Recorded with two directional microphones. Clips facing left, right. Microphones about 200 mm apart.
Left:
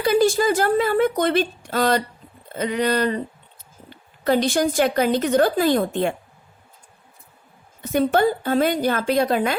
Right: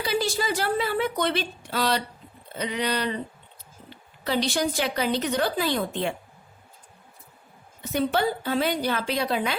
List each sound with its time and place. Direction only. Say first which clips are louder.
0.0 s a woman's voice: left 9 dB; 50° left (ahead or behind)
7.8 s a woman's voice: left 6 dB; 50° left (ahead or behind)